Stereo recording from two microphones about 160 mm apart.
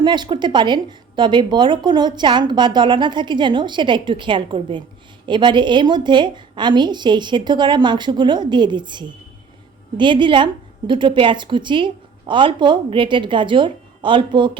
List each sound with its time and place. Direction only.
0.0 s a woman's voice: 30° right (ahead or behind)